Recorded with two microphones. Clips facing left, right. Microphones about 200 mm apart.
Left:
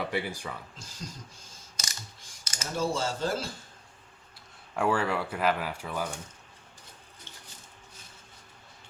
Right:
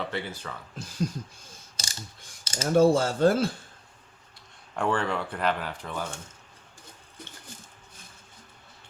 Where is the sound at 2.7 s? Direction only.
55° right (ahead or behind).